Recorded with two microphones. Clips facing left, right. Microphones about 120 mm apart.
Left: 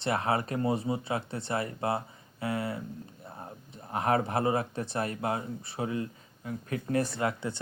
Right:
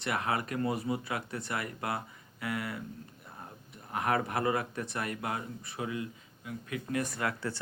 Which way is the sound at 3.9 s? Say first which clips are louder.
Left 3 dB; 30° left (ahead or behind).